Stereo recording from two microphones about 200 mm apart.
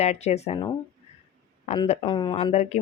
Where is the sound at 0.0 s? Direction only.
35° left (ahead or behind).